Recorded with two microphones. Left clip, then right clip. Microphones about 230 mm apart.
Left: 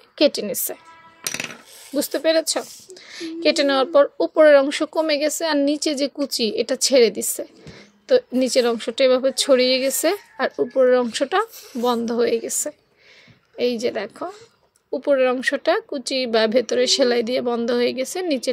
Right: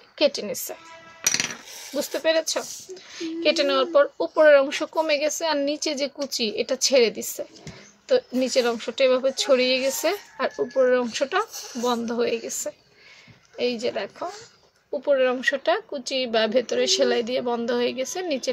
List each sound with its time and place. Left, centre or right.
0.2 s speech: left
2.0 s speech: left
10.5 s speech: centre
10.8 s speech: left
11.5 s speech: centre
11.8 s speech: left